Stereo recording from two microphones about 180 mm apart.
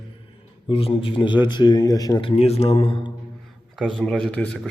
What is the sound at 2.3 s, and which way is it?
Speech, 35° left (ahead or behind).